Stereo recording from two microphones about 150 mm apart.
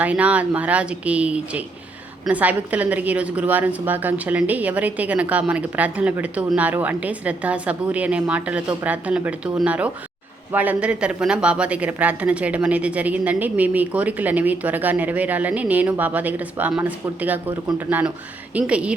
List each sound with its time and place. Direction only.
0.0 s a woman's voice: 10° right (ahead or behind)